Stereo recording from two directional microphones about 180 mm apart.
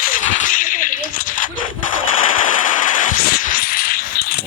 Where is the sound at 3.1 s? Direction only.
50° left (ahead or behind).